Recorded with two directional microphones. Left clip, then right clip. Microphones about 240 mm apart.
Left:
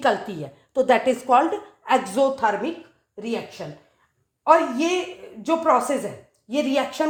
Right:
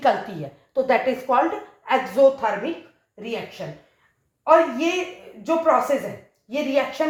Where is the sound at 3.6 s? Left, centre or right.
Left.